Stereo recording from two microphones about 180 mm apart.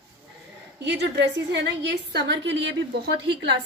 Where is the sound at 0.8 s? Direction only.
70° right (ahead or behind).